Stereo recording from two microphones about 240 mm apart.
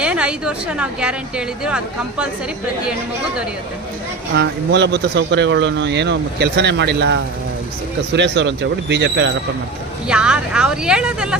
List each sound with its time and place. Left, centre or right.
0.0 s speech: centre
4.4 s speech: right
10.1 s speech: centre